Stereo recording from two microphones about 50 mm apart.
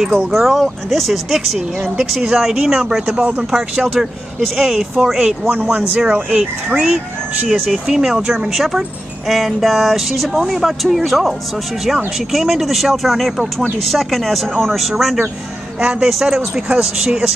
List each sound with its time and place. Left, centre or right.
0.3 s speech: centre
5.5 s speech: right
5.8 s speech: centre
16.5 s speech: centre